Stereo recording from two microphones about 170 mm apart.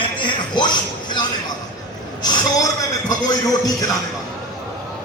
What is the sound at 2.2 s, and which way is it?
A man's voice, 20° left (ahead or behind).